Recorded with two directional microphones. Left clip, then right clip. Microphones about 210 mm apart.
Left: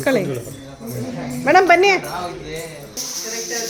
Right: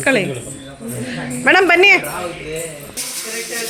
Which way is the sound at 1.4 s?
Centre (ahead or behind).